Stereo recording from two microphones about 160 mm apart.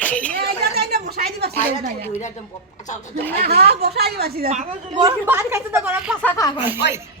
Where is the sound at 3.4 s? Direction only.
85° right.